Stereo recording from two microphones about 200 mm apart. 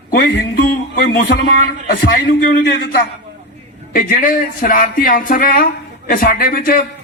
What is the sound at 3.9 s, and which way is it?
Speech, 45° left (ahead or behind).